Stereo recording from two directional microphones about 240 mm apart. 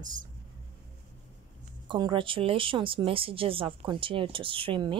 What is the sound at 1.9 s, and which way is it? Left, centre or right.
Speech, centre.